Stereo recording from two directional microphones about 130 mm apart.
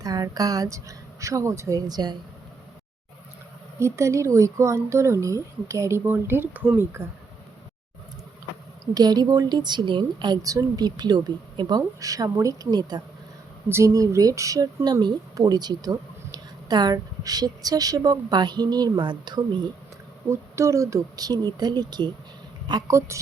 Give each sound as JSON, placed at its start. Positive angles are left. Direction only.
{"t": 0.0, "sound": "speech", "side_deg": -30}
{"t": 3.8, "sound": "speech", "side_deg": -20}
{"t": 8.8, "sound": "a woman's voice", "side_deg": -30}
{"t": 20.2, "sound": "a woman's voice", "side_deg": -20}
{"t": 22.9, "sound": "speech", "side_deg": -25}